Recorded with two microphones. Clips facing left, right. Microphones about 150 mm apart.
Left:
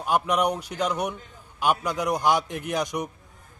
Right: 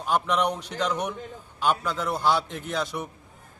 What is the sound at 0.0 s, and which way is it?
A man's voice, 10° left (ahead or behind).